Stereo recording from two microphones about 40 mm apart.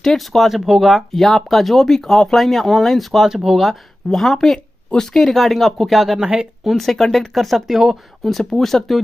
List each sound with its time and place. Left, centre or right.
0.0 s speech: centre
0.5 s speech: centre
3.3 s speech: centre
3.6 s speech: centre
6.1 s a woman's voice: right
6.7 s speech: centre